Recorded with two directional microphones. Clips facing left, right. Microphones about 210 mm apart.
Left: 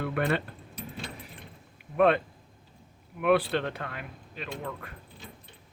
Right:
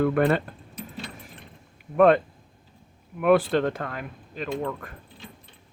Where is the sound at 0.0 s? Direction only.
45° right (ahead or behind).